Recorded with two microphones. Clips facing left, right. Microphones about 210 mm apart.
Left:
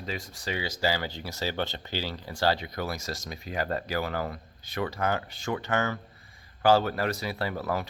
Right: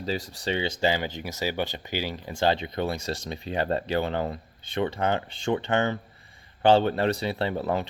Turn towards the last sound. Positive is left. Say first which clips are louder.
# right 4 dB
turn(degrees=-25)  # may be behind; listen again after turning